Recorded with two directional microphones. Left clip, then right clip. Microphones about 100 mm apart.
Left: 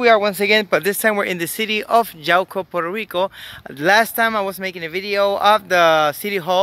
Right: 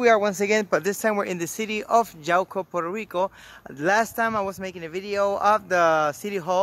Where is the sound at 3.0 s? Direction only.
15° left (ahead or behind).